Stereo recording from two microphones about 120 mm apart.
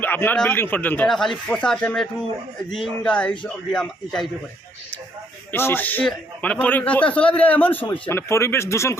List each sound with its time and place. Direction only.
0.0 s a man's voice: 15° left (ahead or behind)
1.0 s a man's voice: 5° left (ahead or behind)
5.5 s a man's voice: 20° left (ahead or behind)